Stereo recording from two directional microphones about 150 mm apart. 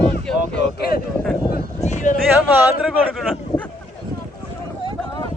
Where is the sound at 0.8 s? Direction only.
90° left.